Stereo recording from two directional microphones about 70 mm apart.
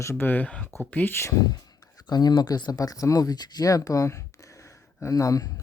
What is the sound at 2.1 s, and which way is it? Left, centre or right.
Speech, left.